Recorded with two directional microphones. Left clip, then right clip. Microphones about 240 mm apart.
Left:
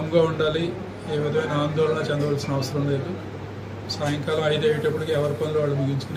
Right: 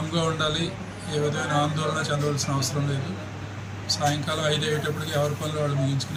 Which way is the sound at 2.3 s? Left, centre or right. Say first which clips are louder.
Left 2 dB; centre.